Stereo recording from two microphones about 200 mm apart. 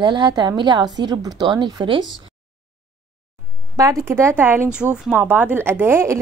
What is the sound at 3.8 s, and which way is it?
A woman's voice, 15° right (ahead or behind).